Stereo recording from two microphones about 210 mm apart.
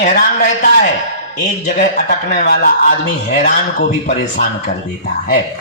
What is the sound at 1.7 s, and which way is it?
Speech, 40° left (ahead or behind).